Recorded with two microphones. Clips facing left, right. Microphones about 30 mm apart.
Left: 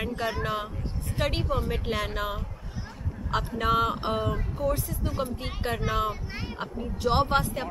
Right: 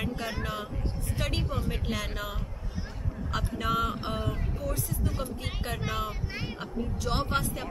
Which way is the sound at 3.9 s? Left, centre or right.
Centre.